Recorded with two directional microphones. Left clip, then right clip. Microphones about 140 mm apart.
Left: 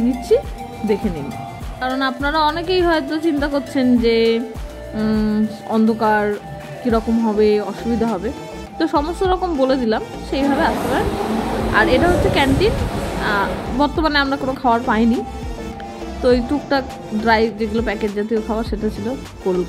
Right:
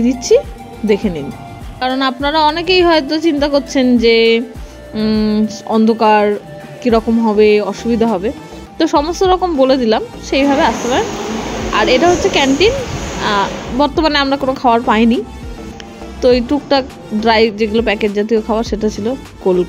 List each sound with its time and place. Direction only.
0.3 s a woman's voice: 40° right (ahead or behind)
4.9 s music: 25° right (ahead or behind)
5.9 s a woman's voice: 40° right (ahead or behind)
16.2 s a woman's voice: 40° right (ahead or behind)